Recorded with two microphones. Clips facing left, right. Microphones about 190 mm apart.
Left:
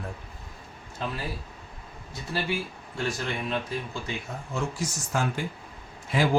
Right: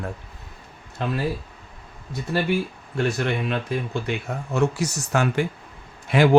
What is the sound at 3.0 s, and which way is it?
Speech, 65° right (ahead or behind).